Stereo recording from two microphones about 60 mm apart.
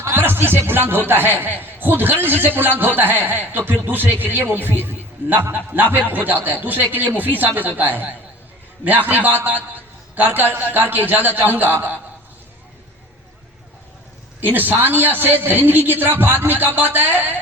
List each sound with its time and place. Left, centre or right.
0.1 s a sound: right
0.6 s a man's voice: right
14.4 s a man's voice: right